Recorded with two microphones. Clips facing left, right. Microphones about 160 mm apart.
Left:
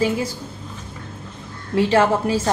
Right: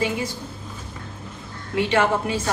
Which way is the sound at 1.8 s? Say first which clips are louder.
Left 4 dB; 35° left (ahead or behind).